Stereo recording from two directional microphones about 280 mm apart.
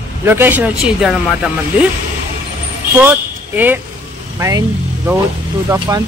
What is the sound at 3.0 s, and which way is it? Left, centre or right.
Speech, centre.